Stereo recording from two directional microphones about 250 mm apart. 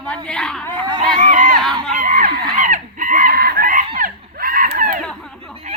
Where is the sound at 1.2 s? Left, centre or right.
Right.